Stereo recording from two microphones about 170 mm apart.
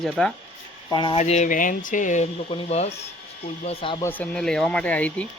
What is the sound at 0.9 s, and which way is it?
Speech, 30° left (ahead or behind).